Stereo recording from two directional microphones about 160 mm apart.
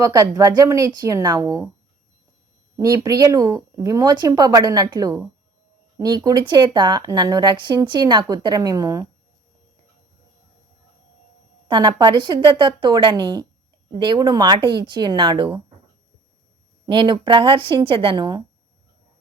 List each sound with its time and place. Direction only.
0.0 s speech: 20° right (ahead or behind)
2.7 s speech: 20° right (ahead or behind)
11.7 s speech: 25° right (ahead or behind)
16.8 s speech: 30° right (ahead or behind)